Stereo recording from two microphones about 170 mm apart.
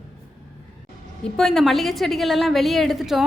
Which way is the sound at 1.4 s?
Centre (ahead or behind).